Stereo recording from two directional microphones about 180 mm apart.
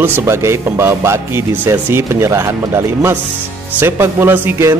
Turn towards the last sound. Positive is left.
turn(degrees=-10)  # may be behind; listen again after turning